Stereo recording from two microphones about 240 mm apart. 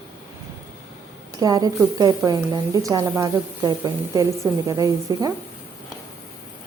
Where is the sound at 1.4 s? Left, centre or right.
Centre.